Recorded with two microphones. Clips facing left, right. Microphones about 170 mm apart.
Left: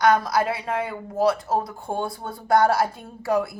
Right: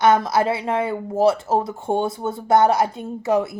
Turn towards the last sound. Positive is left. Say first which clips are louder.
# right 3 dB
turn(degrees=-20)  # may be behind; listen again after turning